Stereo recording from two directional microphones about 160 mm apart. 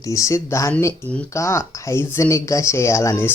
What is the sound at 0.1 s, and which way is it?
Speech, 20° left (ahead or behind).